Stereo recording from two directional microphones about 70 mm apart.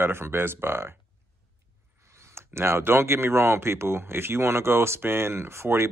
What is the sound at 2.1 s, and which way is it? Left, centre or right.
Speech, right.